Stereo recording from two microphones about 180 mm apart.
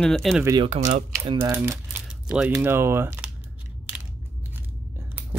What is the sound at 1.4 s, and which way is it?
Typing, 10° right (ahead or behind).